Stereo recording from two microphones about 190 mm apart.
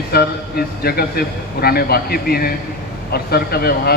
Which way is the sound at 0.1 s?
55° left (ahead or behind).